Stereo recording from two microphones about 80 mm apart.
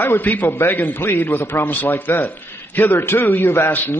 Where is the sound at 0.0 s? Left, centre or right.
Left.